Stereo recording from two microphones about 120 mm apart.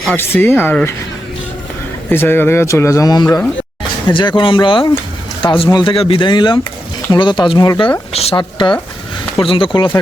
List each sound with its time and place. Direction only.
0.2 s speech: 15° left (ahead or behind)
2.0 s speech: 15° left (ahead or behind)
4.1 s speech: 40° left (ahead or behind)
8.1 s speech: 60° left (ahead or behind)
8.4 s speech: 40° left (ahead or behind)